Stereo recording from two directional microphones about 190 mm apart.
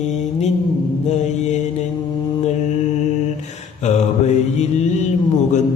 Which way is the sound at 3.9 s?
35° left (ahead or behind).